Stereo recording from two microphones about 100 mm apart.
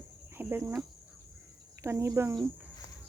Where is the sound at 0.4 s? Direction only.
20° right (ahead or behind).